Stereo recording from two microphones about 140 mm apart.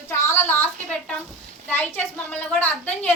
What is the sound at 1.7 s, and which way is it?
A woman's voice, 15° left (ahead or behind).